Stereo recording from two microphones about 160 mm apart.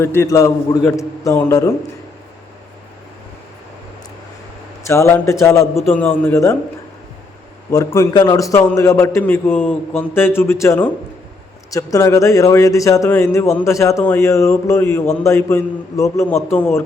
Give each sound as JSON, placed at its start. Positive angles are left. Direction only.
{"t": 0.0, "sound": "speech", "side_deg": 15}
{"t": 4.9, "sound": "a man's voice", "side_deg": 15}
{"t": 7.9, "sound": "a man's voice", "side_deg": 25}